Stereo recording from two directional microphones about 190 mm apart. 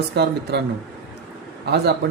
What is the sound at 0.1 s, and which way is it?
Speech, 60° right (ahead or behind).